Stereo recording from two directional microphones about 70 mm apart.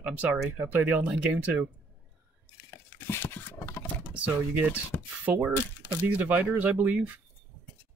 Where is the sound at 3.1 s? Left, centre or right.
Left.